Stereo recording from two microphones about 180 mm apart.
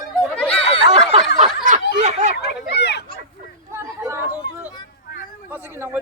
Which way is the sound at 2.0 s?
40° right (ahead or behind).